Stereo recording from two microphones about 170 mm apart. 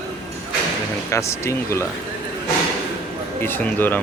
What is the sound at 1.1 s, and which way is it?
Speech, 15° left (ahead or behind).